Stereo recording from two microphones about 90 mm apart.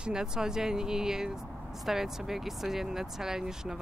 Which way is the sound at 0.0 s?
10° right (ahead or behind).